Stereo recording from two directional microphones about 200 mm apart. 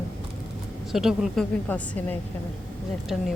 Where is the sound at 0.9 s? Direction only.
Centre (ahead or behind).